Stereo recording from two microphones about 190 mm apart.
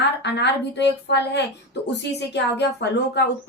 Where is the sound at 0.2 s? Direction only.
65° left (ahead or behind).